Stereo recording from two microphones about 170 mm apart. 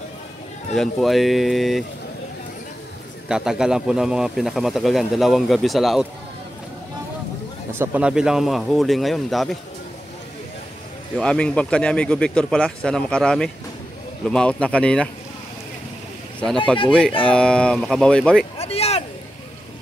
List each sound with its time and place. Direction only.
0.7 s a man's voice: centre (ahead or behind)
3.3 s a man's voice: 5° right (ahead or behind)
7.7 s a man's voice: 10° right (ahead or behind)
11.1 s a man's voice: 5° left (ahead or behind)
17.3 s a man's voice: 5° left (ahead or behind)
18.6 s a sound: 35° left (ahead or behind)